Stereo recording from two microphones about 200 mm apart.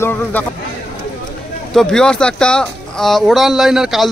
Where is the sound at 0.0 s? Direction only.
10° left (ahead or behind).